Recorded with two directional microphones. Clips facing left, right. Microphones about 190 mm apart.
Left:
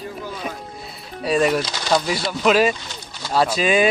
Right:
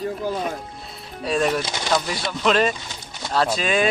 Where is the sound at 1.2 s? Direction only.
5° left (ahead or behind).